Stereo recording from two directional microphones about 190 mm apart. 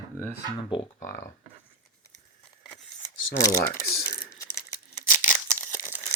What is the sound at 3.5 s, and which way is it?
Speech, 55° left (ahead or behind).